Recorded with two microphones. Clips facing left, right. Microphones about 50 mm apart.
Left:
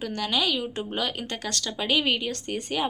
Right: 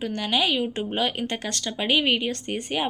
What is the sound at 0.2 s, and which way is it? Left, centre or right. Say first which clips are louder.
Speech: right 2 dB; centre.